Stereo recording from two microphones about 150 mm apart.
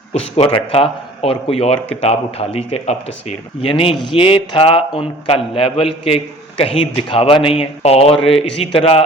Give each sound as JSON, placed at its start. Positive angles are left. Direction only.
{"t": 0.1, "sound": "a man's voice", "side_deg": 40}